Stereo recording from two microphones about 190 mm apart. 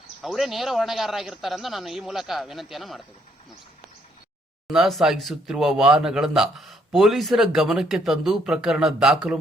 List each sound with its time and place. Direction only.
0.2 s speech: centre (ahead or behind)
4.7 s speech: centre (ahead or behind)